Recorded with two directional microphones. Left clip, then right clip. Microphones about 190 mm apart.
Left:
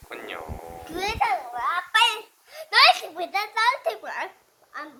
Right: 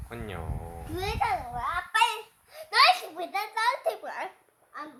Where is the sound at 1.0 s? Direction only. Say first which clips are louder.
Left 4 dB; 10° left (ahead or behind).